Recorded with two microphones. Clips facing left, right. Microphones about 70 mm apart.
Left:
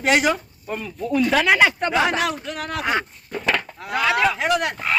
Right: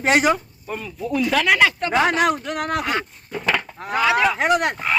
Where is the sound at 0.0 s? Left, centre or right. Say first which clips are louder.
Right 1 dB; right.